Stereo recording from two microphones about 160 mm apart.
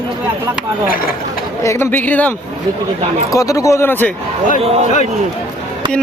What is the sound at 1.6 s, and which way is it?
Speech, 15° left (ahead or behind).